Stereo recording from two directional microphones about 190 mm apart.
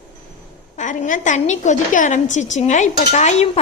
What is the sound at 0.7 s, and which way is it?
A woman's voice, 40° left (ahead or behind).